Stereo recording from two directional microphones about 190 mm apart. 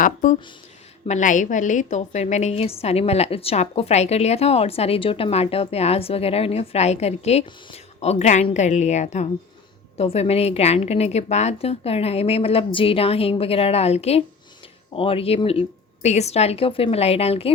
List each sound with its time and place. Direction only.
0.0 s a woman's voice: 45° left (ahead or behind)